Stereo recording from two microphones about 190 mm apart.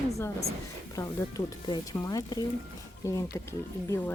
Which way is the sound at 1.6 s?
20° left (ahead or behind).